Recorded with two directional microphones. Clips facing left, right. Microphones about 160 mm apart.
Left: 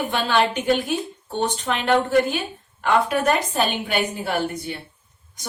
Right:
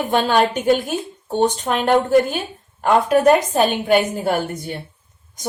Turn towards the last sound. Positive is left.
turn(degrees=-45)  # may be behind; listen again after turning